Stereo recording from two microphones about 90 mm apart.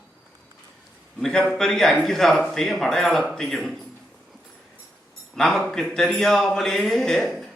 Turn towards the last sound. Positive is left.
turn(degrees=5)  # may be behind; listen again after turning